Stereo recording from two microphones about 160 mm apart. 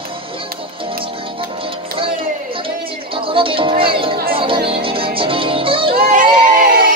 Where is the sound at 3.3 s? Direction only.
35° right (ahead or behind).